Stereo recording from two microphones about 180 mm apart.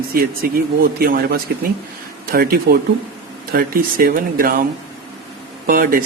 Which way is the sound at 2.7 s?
65° right (ahead or behind).